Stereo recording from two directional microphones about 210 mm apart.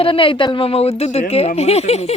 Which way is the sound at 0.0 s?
25° left (ahead or behind).